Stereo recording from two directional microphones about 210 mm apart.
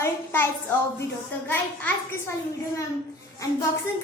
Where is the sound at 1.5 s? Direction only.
10° left (ahead or behind).